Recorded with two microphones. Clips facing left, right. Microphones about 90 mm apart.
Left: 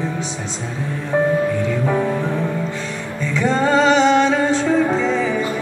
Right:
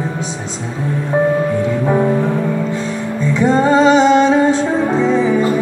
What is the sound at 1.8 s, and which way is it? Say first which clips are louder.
Music: right 5 dB; 15° right (ahead or behind).